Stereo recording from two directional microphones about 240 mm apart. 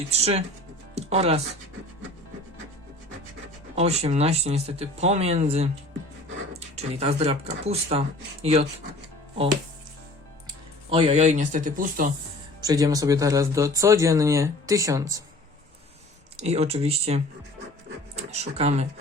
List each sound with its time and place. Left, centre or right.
0.1 s speech: right
0.9 s music: right
3.8 s speech: right
10.9 s speech: right
12.6 s speech: centre
16.4 s speech: right
18.3 s speech: right